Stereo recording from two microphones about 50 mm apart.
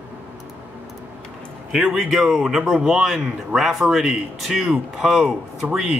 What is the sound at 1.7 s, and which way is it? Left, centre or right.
A man's voice, centre.